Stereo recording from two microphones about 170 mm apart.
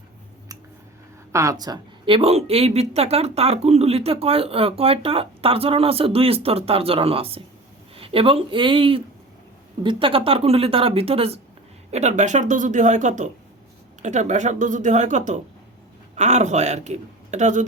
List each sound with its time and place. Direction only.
1.3 s speech: 20° right (ahead or behind); by 17.7 s 45° right (ahead or behind)